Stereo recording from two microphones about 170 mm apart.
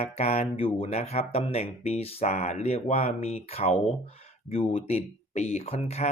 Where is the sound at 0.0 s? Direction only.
40° left (ahead or behind).